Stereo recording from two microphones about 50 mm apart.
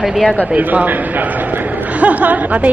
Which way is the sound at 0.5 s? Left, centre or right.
Right.